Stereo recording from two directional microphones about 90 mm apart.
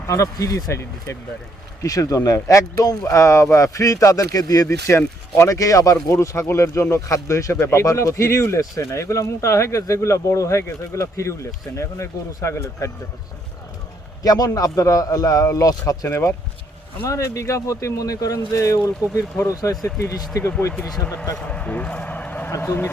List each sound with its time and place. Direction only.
0.1 s speech: 35° left (ahead or behind)
14.3 s speech: 45° left (ahead or behind)
21.3 s a man's voice: 10° left (ahead or behind); by 22.9 s 25° left (ahead or behind)